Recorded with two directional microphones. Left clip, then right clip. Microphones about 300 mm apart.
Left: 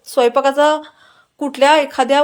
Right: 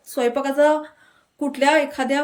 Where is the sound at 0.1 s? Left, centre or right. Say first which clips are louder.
Left 8 dB; centre.